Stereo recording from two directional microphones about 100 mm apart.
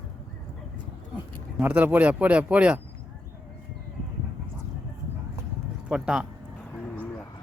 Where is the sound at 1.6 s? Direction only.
20° right (ahead or behind).